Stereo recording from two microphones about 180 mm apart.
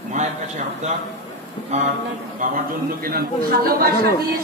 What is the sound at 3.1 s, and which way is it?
Speech, 55° right (ahead or behind).